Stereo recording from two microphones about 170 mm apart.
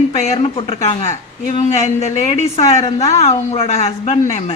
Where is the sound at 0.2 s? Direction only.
35° left (ahead or behind).